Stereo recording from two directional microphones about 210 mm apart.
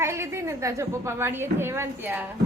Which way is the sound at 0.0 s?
10° right (ahead or behind).